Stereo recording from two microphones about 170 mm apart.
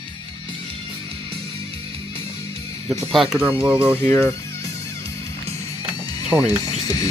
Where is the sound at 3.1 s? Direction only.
Centre (ahead or behind).